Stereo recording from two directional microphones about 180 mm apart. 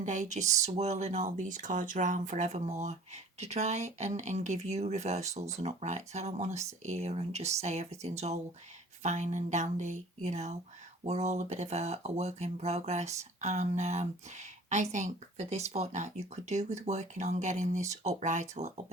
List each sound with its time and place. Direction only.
0.0 s speech: 45° right (ahead or behind)